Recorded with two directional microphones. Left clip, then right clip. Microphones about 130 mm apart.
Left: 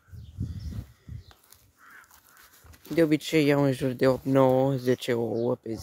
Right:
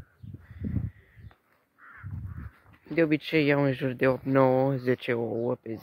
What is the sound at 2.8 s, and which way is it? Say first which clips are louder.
Speech: left 2 dB; 35° left (ahead or behind).